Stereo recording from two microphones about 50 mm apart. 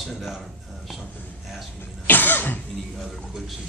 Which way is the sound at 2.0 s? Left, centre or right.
Left.